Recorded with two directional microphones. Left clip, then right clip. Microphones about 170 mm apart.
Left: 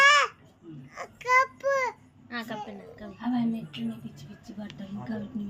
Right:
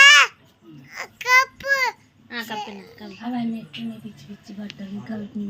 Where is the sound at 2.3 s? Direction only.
25° right (ahead or behind).